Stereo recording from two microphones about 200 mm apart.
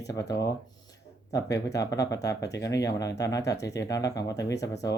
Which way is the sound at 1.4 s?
15° left (ahead or behind).